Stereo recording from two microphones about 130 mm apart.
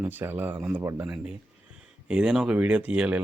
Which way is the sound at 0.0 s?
15° right (ahead or behind).